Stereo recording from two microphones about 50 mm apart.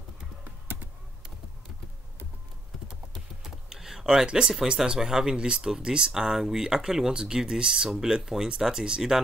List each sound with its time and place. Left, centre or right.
3.4 s speech: centre